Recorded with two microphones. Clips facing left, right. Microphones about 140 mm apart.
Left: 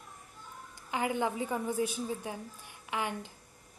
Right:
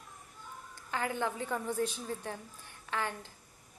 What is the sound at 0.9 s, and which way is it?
A woman's voice, 15° left (ahead or behind).